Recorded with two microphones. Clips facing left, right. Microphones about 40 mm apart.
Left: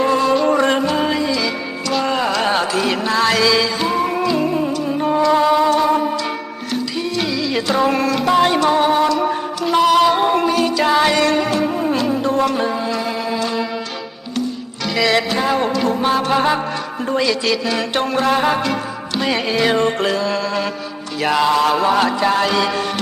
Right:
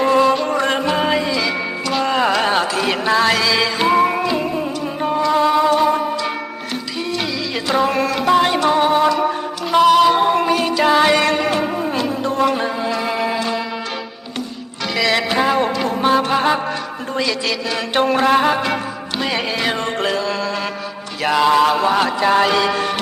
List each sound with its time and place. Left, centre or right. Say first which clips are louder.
0.0 s music: right 1 dB; centre
0.5 s music: left 3 dB; centre
0.9 s music: even; centre
3.6 s music: right 3 dB; right
4.9 s music: left 2 dB; centre
7.5 s music: even; centre
10.4 s music: even; centre
11.4 s music: even; right
11.8 s music: left 2 dB; centre
14.8 s music: left 1 dB; centre
19.2 s music: left 3 dB; centre